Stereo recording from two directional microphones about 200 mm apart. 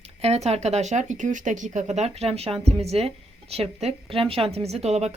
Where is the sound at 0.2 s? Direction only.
30° right (ahead or behind).